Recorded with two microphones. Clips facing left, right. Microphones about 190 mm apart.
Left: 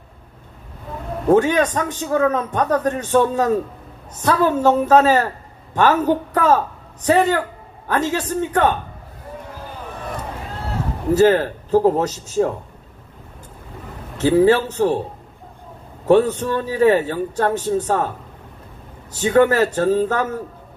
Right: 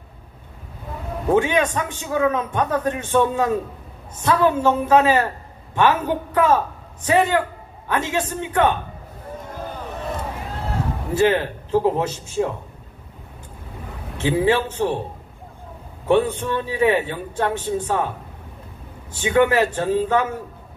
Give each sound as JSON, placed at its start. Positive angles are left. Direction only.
{"t": 1.3, "sound": "a man's voice", "side_deg": 40}
{"t": 11.1, "sound": "a man's voice", "side_deg": 40}
{"t": 14.1, "sound": "a man's voice", "side_deg": 40}
{"t": 16.1, "sound": "a man's voice", "side_deg": 40}
{"t": 19.1, "sound": "a man's voice", "side_deg": 40}